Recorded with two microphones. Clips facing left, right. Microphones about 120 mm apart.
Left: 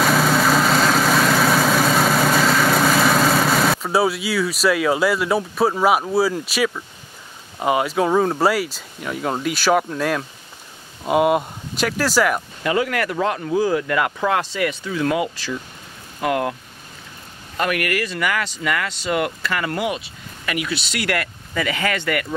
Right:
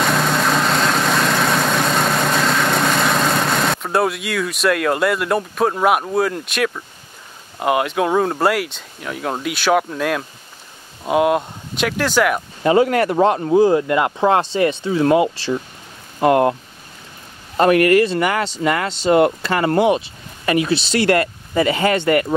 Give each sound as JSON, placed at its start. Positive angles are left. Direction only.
{"t": 0.0, "sound": "vehicle", "side_deg": 0}
{"t": 7.5, "sound": "speech", "side_deg": 0}
{"t": 12.6, "sound": "speech", "side_deg": -30}
{"t": 17.6, "sound": "speech", "side_deg": -30}